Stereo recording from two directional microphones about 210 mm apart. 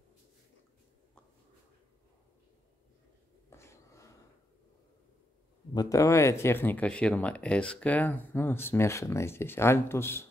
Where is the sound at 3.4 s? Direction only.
10° left (ahead or behind).